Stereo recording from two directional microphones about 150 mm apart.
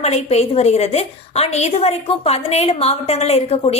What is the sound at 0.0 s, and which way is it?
A woman's voice, 45° left (ahead or behind).